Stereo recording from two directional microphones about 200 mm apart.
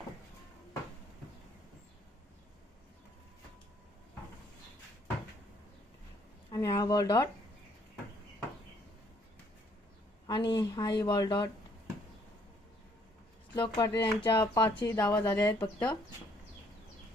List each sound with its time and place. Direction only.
6.5 s speech: 20° left (ahead or behind)
10.2 s a sound: 25° left (ahead or behind)
10.6 s speech: 20° left (ahead or behind)
13.6 s speech: 20° left (ahead or behind)